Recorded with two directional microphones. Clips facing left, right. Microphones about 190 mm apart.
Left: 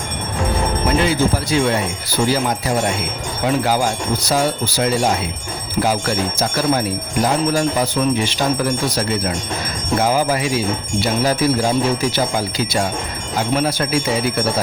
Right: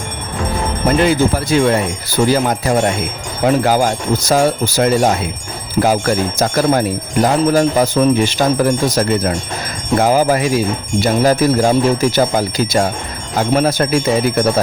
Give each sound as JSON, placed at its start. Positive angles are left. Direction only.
{"t": 0.9, "sound": "speech", "side_deg": -55}